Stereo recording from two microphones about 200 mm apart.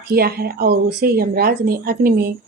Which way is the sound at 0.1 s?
50° right (ahead or behind).